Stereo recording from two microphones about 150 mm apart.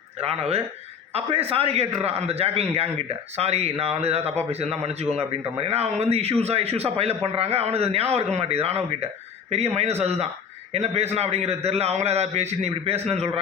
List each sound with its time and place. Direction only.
0.2 s a man's voice: 45° right (ahead or behind)